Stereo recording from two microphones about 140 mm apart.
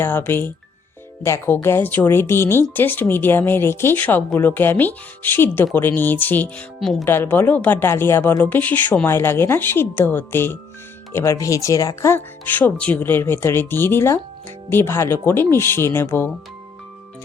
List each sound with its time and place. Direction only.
0.0 s speech: 15° left (ahead or behind)